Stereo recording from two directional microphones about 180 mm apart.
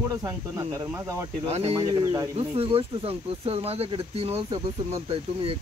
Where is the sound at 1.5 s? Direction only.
35° right (ahead or behind).